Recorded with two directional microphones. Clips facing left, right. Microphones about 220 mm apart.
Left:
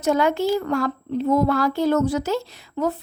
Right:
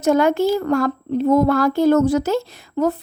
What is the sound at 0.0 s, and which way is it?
A woman's voice, 45° right (ahead or behind).